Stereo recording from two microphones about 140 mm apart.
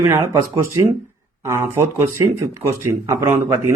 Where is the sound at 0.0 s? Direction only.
20° right (ahead or behind).